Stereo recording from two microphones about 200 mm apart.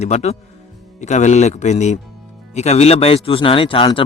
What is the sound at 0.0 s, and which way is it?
Speech, 35° left (ahead or behind).